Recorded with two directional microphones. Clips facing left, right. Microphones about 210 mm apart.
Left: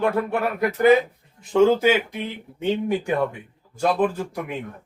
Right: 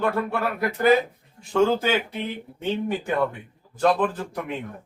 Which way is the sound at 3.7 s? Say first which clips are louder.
Even; 10° left (ahead or behind).